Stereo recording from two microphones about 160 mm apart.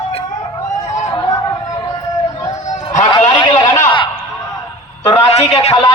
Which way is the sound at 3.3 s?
30° left (ahead or behind).